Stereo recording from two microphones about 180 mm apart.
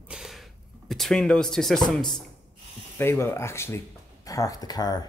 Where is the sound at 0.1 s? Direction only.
Centre (ahead or behind).